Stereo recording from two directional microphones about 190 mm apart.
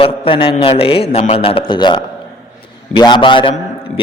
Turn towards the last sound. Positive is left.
turn(degrees=25)  # may be behind; listen again after turning